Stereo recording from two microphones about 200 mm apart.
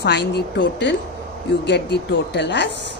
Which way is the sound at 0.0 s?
55° left (ahead or behind).